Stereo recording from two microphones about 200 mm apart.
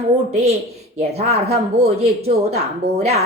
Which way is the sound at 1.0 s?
30° right (ahead or behind).